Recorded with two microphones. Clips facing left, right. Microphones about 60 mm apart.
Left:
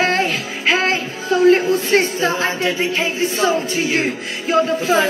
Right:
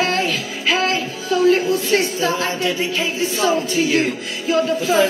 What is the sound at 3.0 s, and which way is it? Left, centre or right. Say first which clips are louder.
Speech: left 1 dB; left.